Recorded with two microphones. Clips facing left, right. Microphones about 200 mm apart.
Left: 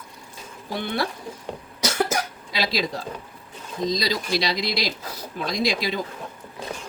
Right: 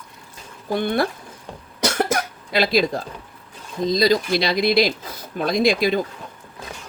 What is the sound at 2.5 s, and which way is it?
Speech, 55° right (ahead or behind).